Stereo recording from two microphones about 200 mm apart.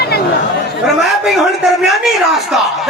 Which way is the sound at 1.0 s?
Centre (ahead or behind).